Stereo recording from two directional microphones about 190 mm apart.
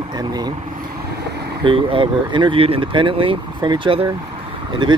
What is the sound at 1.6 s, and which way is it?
Speech, 25° right (ahead or behind).